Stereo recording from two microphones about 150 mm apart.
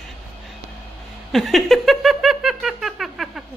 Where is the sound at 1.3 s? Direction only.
Centre (ahead or behind).